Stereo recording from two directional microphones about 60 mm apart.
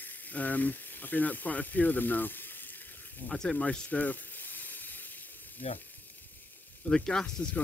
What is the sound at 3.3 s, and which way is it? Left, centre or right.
Hiss, centre.